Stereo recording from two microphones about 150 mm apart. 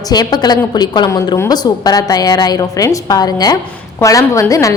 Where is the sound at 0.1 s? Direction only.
25° left (ahead or behind).